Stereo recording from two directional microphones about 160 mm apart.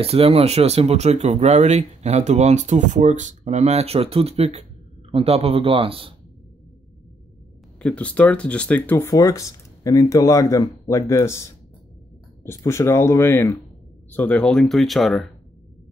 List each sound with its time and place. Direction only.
0.0 s a man's voice: 40° right (ahead or behind)
7.8 s speech: 10° left (ahead or behind)